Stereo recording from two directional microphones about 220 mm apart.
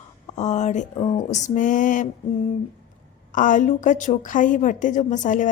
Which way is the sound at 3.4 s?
35° left (ahead or behind).